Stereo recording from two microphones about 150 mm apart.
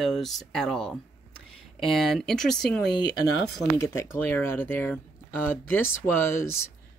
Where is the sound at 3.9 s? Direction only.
15° left (ahead or behind).